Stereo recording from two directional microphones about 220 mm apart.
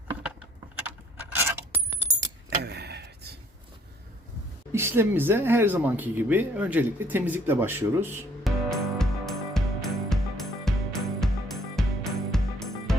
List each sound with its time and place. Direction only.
1.4 s coin: 10° right (ahead or behind)
2.6 s a sound: 50° right (ahead or behind)
4.7 s speech: 10° right (ahead or behind)
8.7 s music: centre (ahead or behind)